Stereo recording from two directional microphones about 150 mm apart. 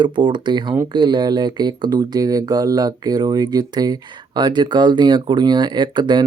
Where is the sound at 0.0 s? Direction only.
30° right (ahead or behind).